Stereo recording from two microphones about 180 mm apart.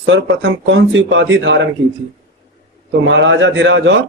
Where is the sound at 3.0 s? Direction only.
90° right.